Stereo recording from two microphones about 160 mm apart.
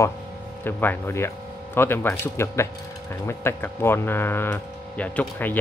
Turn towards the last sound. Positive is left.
turn(degrees=10)  # may be behind; listen again after turning